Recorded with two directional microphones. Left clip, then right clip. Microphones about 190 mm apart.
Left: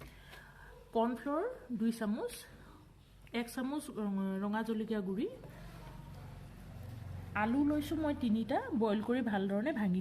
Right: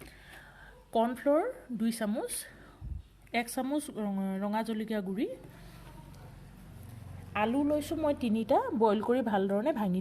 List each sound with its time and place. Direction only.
0.9 s a woman's voice: 45° right (ahead or behind)
3.3 s a woman's voice: 35° right (ahead or behind)
7.3 s a woman's voice: 40° right (ahead or behind); by 10.0 s 25° right (ahead or behind)